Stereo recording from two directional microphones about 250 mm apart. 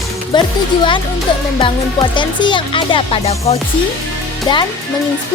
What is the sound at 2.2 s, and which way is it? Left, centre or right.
Music, centre.